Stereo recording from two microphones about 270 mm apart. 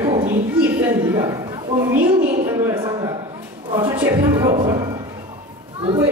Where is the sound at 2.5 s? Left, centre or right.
Centre.